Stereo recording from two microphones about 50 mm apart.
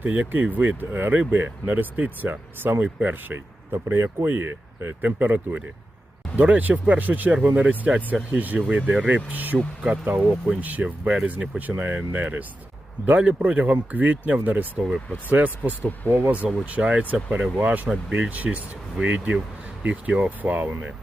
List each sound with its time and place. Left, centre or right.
0.0 s speech: right
0.9 s speech: right
3.3 s speech: right
5.0 s speech: right
11.7 s speech: right
16.0 s speech: right
16.6 s speech: right